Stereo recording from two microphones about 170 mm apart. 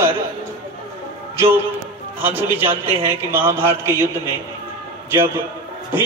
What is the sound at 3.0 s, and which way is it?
Speech, 15° right (ahead or behind).